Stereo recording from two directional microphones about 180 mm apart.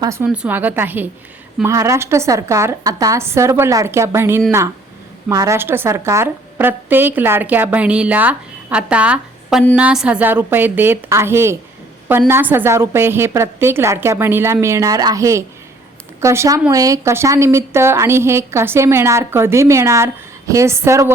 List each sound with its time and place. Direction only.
0.0 s a woman's voice: 15° right (ahead or behind)